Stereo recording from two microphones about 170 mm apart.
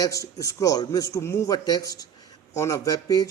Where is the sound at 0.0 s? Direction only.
20° left (ahead or behind).